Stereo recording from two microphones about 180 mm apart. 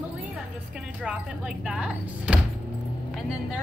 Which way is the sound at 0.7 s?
5° right (ahead or behind).